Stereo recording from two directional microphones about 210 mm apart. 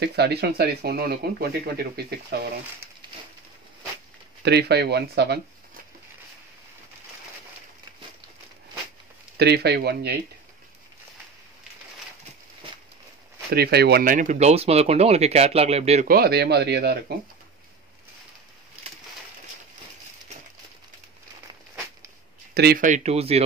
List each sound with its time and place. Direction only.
0.0 s speech: 50° right (ahead or behind)
4.4 s speech: 50° right (ahead or behind)
9.4 s speech: 50° right (ahead or behind)
13.5 s speech: 50° right (ahead or behind); by 16.1 s 30° right (ahead or behind)
16.1 s speech: 50° right (ahead or behind)
22.5 s speech: 50° right (ahead or behind); by 23.4 s 30° right (ahead or behind)